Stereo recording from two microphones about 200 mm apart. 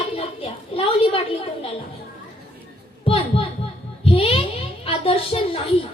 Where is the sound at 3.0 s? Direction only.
30° left (ahead or behind).